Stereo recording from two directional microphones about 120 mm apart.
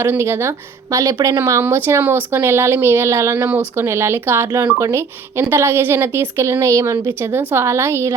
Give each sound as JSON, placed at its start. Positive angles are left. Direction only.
{"t": 0.0, "sound": "speech", "side_deg": -20}